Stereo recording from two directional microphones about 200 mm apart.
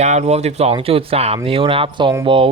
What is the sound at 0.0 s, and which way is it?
Speech, 35° right (ahead or behind).